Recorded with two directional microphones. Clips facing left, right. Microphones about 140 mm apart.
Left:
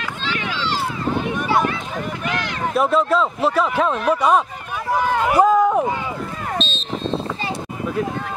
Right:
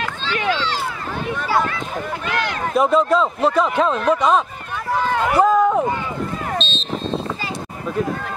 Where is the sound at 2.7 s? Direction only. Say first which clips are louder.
Right 1 dB; 5° left (ahead or behind).